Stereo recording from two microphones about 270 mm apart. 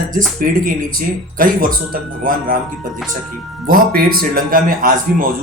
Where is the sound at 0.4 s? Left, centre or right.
Right.